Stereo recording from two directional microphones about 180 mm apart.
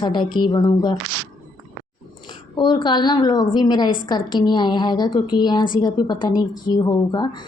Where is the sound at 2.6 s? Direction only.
25° left (ahead or behind).